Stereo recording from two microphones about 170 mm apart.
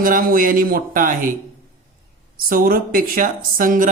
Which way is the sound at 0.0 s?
55° right (ahead or behind).